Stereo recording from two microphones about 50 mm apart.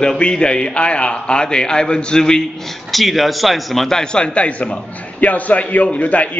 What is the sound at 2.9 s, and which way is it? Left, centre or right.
A man's voice, centre.